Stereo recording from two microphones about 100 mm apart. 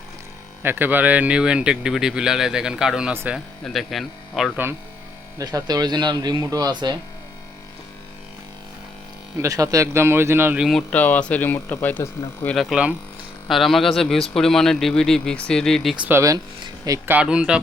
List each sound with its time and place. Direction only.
0.6 s speech: 20° right (ahead or behind)
3.1 s a man's voice: 20° right (ahead or behind)
3.3 s a man's voice: centre (ahead or behind)
5.4 s speech: 40° right (ahead or behind)
9.4 s a man's voice: 35° right (ahead or behind)
10.6 s a man's voice: centre (ahead or behind)
10.9 s speech: 15° left (ahead or behind)
12.5 s a man's voice: centre (ahead or behind)
16.6 s a sound: 40° right (ahead or behind)
17.1 s speech: 10° right (ahead or behind)